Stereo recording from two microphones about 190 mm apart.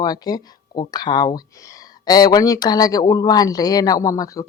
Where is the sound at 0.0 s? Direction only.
20° left (ahead or behind).